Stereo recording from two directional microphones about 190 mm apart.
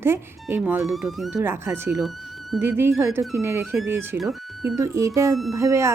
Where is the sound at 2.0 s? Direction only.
Centre (ahead or behind).